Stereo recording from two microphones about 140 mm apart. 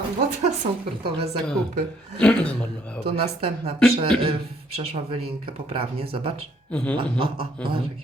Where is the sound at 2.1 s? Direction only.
5° left (ahead or behind).